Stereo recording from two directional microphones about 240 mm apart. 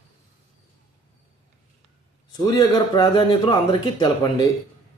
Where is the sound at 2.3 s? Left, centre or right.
Centre.